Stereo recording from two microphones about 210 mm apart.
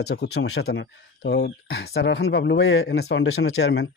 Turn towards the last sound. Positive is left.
turn(degrees=55)  # may be behind; listen again after turning